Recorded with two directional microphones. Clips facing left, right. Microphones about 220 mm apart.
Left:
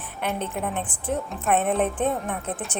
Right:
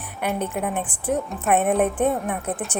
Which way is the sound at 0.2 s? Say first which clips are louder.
Right 3 dB; 10° right (ahead or behind).